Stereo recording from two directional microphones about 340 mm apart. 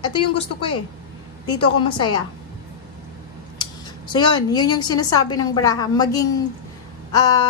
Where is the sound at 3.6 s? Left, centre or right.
Centre.